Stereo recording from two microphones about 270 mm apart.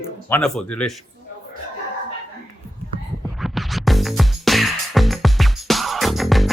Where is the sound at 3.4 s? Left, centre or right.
Centre.